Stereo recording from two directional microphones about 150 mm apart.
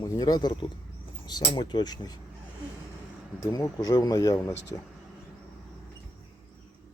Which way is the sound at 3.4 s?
25° left (ahead or behind).